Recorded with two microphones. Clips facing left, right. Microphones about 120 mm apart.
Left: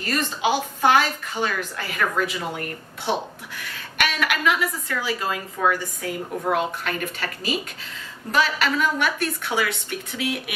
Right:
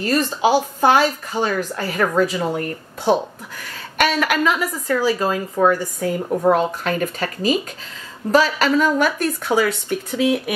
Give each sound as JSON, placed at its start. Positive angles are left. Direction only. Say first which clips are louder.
{"t": 0.0, "sound": "a woman's voice", "louder": "right 6 dB", "side_deg": -35}